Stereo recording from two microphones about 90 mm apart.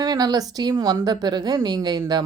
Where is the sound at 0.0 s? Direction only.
45° right (ahead or behind).